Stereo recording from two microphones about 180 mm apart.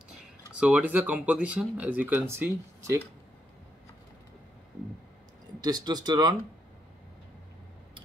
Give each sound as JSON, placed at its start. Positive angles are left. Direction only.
{"t": 0.6, "sound": "speech", "side_deg": -5}
{"t": 5.6, "sound": "speech", "side_deg": -20}